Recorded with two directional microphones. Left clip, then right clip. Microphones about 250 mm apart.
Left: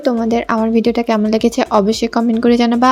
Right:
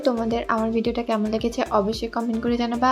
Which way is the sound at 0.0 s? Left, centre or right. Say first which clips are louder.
Left 7 dB; left.